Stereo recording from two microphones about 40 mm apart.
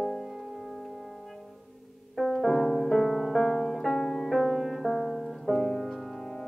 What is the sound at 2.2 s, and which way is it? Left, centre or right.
Music, centre.